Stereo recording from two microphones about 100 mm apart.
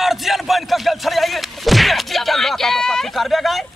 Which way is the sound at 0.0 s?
Centre (ahead or behind).